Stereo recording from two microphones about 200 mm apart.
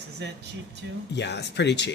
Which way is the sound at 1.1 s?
60° left (ahead or behind).